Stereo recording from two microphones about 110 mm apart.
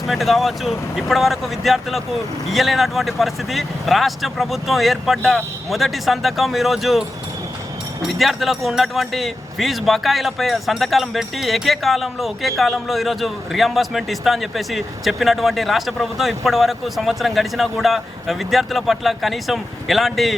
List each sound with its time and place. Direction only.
0.1 s speech: centre (ahead or behind)
8.0 s speech: centre (ahead or behind)